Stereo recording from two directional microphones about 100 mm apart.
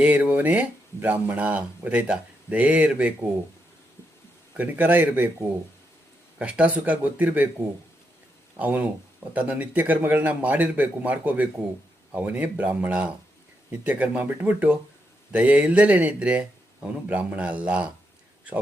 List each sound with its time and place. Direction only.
0.0 s speech: 15° right (ahead or behind)
4.5 s speech: 15° right (ahead or behind)
6.4 s speech: 15° right (ahead or behind)
8.5 s speech: 15° right (ahead or behind)